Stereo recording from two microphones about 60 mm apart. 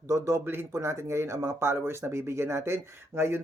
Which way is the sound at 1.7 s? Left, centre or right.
Right.